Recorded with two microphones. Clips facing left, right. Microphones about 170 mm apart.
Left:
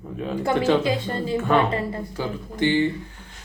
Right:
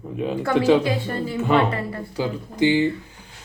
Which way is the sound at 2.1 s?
15° right (ahead or behind).